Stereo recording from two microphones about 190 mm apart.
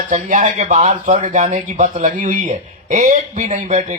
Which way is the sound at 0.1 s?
40° right (ahead or behind).